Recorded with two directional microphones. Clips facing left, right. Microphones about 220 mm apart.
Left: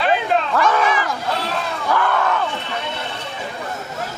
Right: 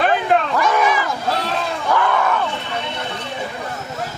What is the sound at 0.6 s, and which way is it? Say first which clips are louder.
Dog: even; 10° right (ahead or behind).